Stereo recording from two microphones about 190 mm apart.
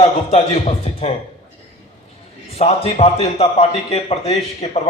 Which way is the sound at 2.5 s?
30° left (ahead or behind).